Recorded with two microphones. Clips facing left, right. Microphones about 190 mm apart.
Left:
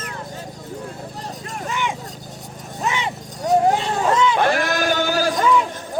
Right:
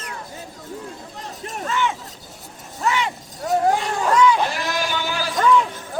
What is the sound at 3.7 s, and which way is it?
Vehicle, 25° left (ahead or behind).